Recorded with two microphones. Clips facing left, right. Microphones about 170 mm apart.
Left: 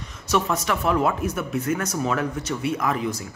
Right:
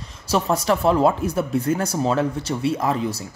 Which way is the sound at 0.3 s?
35° right (ahead or behind).